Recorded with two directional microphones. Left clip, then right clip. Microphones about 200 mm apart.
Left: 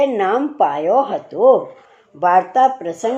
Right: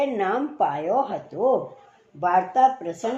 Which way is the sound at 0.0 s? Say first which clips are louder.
Left 7 dB; 40° left (ahead or behind).